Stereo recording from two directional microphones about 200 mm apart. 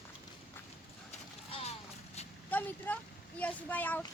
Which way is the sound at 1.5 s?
30° left (ahead or behind).